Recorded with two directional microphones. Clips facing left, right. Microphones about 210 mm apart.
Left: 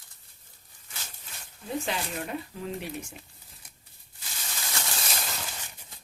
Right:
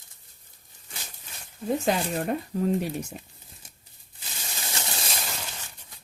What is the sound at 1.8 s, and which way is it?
Speech, 45° right (ahead or behind).